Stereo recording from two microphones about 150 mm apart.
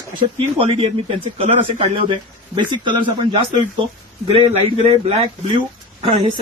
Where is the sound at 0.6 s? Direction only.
40° right (ahead or behind).